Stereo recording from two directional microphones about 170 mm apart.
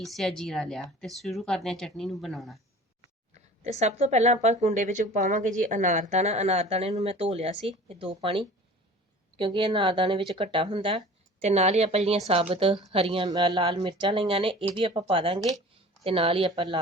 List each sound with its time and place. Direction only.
0.0 s speech: centre (ahead or behind)
3.3 s speech: 40° right (ahead or behind)